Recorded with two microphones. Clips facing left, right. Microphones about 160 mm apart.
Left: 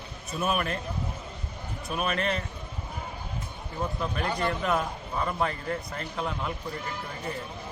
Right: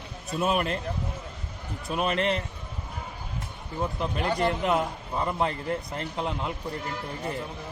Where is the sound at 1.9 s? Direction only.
25° right (ahead or behind).